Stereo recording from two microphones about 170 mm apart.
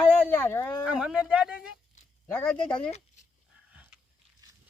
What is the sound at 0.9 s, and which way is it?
Speech, 5° right (ahead or behind).